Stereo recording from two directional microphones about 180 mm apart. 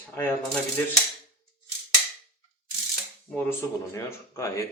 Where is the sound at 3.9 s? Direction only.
15° left (ahead or behind).